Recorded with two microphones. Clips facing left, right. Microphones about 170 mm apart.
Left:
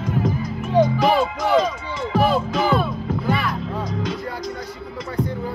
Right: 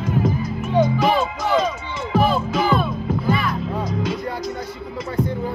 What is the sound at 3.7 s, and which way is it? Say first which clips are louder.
Music: right 2 dB; 10° right (ahead or behind).